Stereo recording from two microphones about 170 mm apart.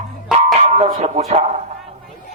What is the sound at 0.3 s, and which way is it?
Music, 40° right (ahead or behind).